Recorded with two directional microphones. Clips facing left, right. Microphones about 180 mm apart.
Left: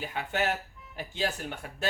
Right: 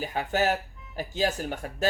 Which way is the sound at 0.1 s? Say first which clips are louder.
Right 4 dB; 40° right (ahead or behind).